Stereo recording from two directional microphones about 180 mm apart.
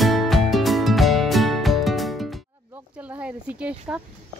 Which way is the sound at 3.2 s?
5° right (ahead or behind).